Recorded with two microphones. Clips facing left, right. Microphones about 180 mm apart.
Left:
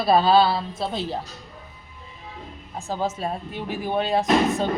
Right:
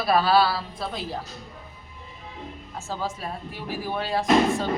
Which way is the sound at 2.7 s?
15° left (ahead or behind).